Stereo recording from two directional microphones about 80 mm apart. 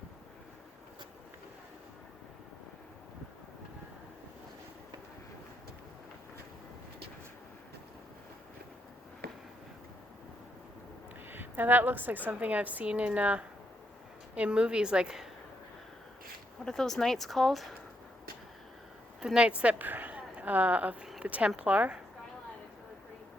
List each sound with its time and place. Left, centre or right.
11.3 s a woman's voice: right; by 15.3 s centre
16.6 s speech: centre
19.2 s a woman's voice: centre